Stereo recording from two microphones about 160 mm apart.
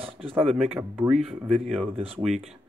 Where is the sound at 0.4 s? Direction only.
40° right (ahead or behind).